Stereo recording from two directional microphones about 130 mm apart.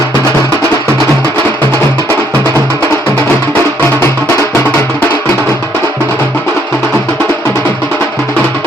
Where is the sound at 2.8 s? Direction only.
15° left (ahead or behind).